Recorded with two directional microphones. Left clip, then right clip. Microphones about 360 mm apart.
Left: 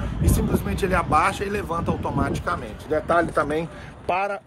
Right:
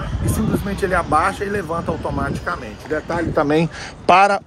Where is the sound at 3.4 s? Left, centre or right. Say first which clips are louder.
Right 6 dB; right.